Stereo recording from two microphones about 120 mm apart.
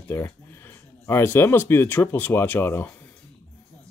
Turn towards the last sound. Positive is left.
turn(degrees=15)  # may be behind; listen again after turning